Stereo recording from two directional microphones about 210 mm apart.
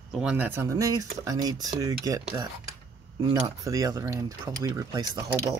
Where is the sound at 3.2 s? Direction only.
20° right (ahead or behind).